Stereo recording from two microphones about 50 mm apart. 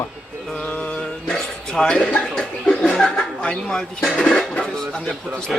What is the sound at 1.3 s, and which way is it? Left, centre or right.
Bow-wow, centre.